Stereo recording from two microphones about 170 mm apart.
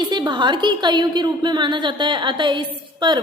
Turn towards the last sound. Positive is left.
turn(degrees=-25)  # may be behind; listen again after turning